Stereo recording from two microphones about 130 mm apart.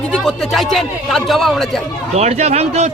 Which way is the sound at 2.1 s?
55° right (ahead or behind).